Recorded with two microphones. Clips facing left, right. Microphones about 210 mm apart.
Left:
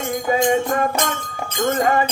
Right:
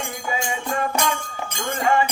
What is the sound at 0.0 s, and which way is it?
Music, 45° left (ahead or behind).